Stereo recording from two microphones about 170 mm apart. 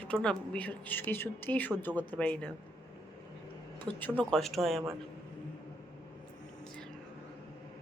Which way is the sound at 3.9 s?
5° left (ahead or behind).